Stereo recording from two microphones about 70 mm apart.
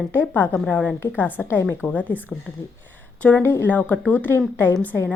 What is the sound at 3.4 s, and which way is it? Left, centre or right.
A woman's voice, left.